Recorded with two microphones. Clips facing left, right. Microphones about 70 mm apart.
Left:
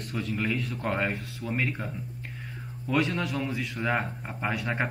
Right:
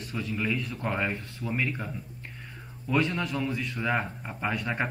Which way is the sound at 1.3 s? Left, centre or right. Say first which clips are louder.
Even; centre.